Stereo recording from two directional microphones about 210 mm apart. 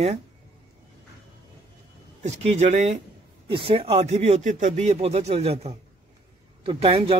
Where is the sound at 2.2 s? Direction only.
30° right (ahead or behind).